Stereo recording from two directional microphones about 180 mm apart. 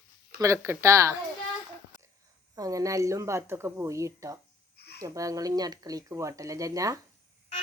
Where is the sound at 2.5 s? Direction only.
20° right (ahead or behind).